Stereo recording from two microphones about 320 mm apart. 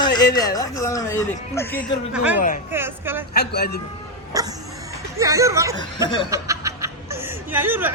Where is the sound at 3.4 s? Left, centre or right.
Left.